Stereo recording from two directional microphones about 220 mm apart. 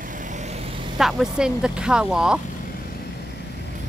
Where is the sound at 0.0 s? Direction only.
35° right (ahead or behind).